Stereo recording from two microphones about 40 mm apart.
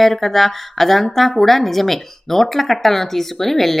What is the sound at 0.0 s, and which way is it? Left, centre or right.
A woman's voice, centre.